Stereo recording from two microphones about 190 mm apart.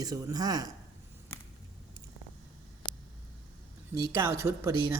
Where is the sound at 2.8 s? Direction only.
25° left (ahead or behind).